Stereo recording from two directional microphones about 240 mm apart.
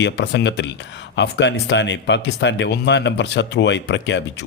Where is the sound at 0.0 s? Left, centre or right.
Left.